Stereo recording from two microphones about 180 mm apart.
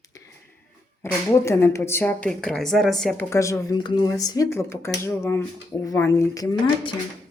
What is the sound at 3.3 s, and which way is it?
Speech, 15° left (ahead or behind).